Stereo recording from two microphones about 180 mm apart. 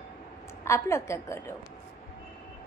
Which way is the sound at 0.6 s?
15° left (ahead or behind).